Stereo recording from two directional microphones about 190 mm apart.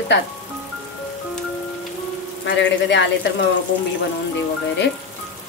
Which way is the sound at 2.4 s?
70° left (ahead or behind).